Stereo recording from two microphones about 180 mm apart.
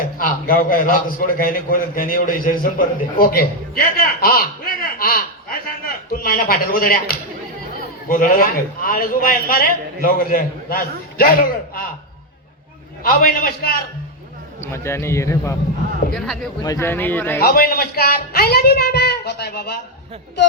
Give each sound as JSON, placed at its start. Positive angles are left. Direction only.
{"t": 0.2, "sound": "a man's voice", "side_deg": 50}
{"t": 8.0, "sound": "a man's voice", "side_deg": 50}
{"t": 13.0, "sound": "speech", "side_deg": 55}
{"t": 14.6, "sound": "a man's voice", "side_deg": 15}
{"t": 16.1, "sound": "speech", "side_deg": 0}
{"t": 16.6, "sound": "a man's voice", "side_deg": 15}
{"t": 17.4, "sound": "speech", "side_deg": 55}